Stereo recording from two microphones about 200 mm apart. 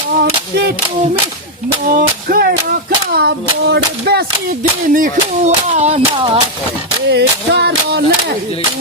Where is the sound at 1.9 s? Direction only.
45° right (ahead or behind).